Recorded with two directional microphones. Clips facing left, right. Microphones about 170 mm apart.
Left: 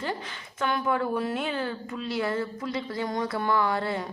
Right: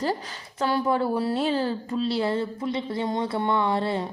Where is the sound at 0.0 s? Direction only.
35° right (ahead or behind).